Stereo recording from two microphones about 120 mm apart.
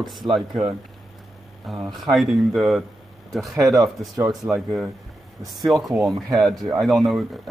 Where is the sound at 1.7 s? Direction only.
Centre (ahead or behind).